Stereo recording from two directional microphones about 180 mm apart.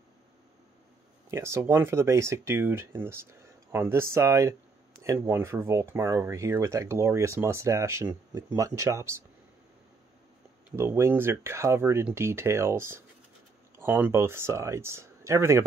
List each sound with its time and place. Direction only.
1.3 s speech: 15° right (ahead or behind)
10.8 s speech: 15° right (ahead or behind)